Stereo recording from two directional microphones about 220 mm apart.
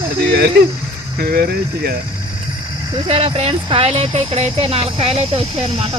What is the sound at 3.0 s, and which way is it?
Speech, 25° right (ahead or behind).